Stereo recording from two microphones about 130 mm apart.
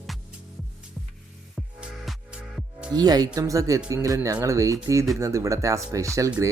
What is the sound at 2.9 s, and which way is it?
Speech, 30° right (ahead or behind).